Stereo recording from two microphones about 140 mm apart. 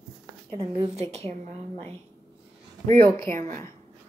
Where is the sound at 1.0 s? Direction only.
50° right (ahead or behind).